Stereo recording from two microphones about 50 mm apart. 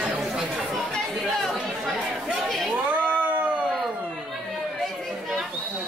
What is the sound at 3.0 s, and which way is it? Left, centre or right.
Cat, right.